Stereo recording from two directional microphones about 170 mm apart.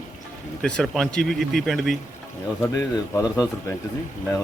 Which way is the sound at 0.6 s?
5° left (ahead or behind).